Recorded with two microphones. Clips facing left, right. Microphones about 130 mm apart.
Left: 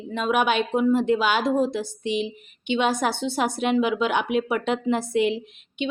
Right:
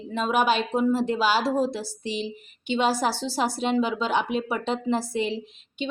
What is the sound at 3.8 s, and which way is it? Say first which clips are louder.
Speech: left 3 dB; 30° right (ahead or behind).